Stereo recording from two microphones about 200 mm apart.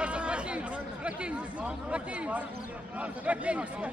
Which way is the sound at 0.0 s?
5° right (ahead or behind).